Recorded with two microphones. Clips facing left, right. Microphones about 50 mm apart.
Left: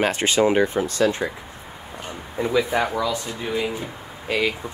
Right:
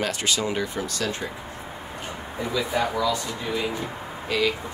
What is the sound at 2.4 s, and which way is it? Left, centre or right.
Speech, left.